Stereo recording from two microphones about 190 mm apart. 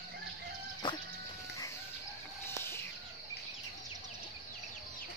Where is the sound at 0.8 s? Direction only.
25° left (ahead or behind).